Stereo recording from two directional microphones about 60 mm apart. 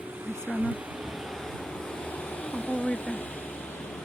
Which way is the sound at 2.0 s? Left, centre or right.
Left.